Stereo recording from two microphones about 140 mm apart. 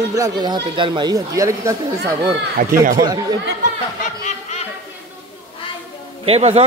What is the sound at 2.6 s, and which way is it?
Speech, 65° right (ahead or behind).